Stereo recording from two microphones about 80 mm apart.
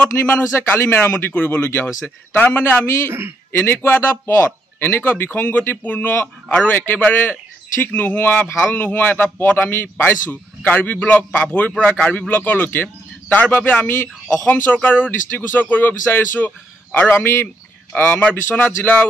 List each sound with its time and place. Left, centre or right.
0.0 s speech: left
3.1 s a man's voice: right
3.5 s a man's voice: left
17.1 s a man's voice: left
17.9 s speech: left